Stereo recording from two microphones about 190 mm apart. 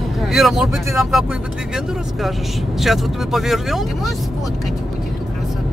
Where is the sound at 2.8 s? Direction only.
Centre (ahead or behind).